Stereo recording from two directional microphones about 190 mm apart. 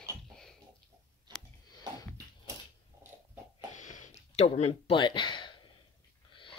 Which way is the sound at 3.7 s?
40° left (ahead or behind).